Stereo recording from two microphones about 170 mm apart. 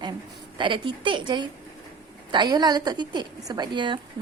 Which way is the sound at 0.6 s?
30° right (ahead or behind).